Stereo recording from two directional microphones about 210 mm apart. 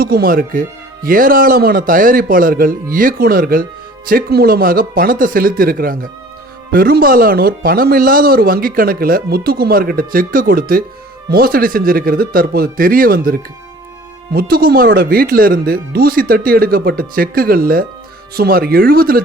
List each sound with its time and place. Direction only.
0.0 s speech: 45° right (ahead or behind)
14.3 s speech: 45° right (ahead or behind)